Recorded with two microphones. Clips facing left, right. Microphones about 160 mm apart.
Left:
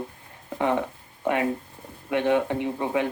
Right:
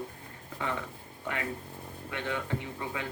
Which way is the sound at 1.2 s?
25° left (ahead or behind).